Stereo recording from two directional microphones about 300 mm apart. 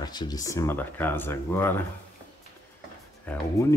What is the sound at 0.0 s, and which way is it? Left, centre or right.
Speech, centre.